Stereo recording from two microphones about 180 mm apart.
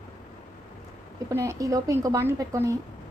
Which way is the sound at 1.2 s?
15° right (ahead or behind).